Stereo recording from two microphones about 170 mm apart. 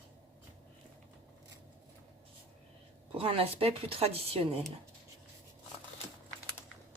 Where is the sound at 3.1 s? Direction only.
35° right (ahead or behind).